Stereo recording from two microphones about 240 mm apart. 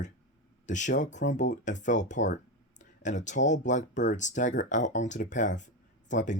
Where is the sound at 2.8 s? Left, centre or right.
Left.